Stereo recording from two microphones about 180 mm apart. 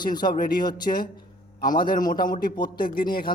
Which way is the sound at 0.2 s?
55° left (ahead or behind).